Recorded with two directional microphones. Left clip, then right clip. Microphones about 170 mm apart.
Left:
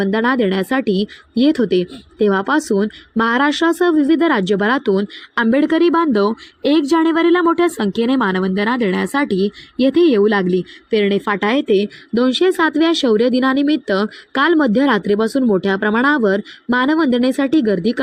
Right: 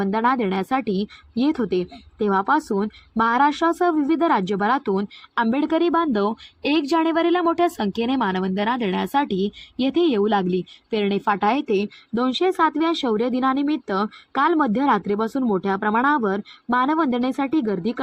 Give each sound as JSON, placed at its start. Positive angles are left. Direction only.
{"t": 0.0, "sound": "speech", "side_deg": 35}